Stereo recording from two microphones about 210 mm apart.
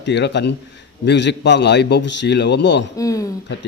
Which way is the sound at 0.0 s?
55° left (ahead or behind).